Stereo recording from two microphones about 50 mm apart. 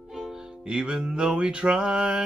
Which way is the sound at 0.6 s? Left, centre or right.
Centre.